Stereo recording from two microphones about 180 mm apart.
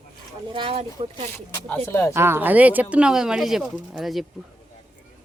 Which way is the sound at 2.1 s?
15° right (ahead or behind).